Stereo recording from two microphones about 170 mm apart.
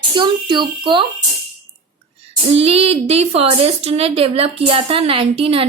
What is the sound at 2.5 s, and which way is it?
Speech, 35° right (ahead or behind).